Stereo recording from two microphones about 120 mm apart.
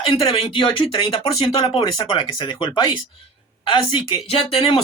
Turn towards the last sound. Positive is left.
turn(degrees=50)  # may be behind; listen again after turning